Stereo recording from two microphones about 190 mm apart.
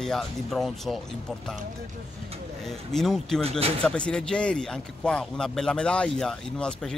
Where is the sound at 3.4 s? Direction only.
30° right (ahead or behind).